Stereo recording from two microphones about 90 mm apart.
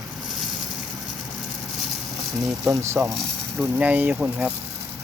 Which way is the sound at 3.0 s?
15° right (ahead or behind).